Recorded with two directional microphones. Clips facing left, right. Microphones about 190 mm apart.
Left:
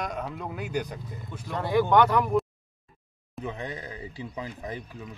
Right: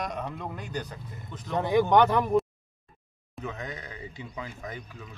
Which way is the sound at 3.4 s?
30° left (ahead or behind).